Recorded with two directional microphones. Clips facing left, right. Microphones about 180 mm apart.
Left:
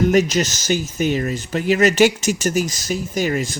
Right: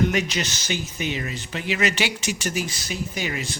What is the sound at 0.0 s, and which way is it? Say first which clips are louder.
Speech: left 7 dB; 40° left (ahead or behind).